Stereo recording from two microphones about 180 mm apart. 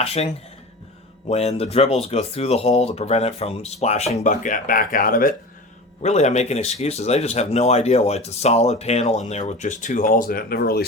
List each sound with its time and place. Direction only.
0.0 s speech: 35° left (ahead or behind)
1.3 s speech: 35° left (ahead or behind); by 5.3 s 50° left (ahead or behind)
6.0 s speech: 40° left (ahead or behind); by 10.8 s 60° left (ahead or behind)